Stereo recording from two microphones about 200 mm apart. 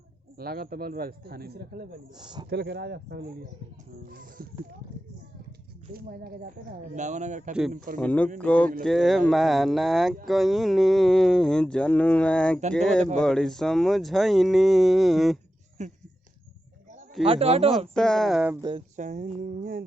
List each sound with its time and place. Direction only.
0.3 s a man's voice: 50° right (ahead or behind)
2.1 s speech: 20° right (ahead or behind)
2.5 s speech: 55° right (ahead or behind)
4.1 s a sound: 45° right (ahead or behind)
5.9 s speech: 50° right (ahead or behind)
8.0 s a sound: 5° left (ahead or behind)
15.8 s speech: 35° right (ahead or behind)
17.2 s speech: 30° right (ahead or behind)
17.7 s a sound: centre (ahead or behind)
18.9 s music: 40° right (ahead or behind)